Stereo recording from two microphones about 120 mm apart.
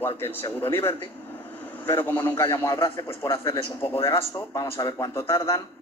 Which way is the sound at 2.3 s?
35° left (ahead or behind).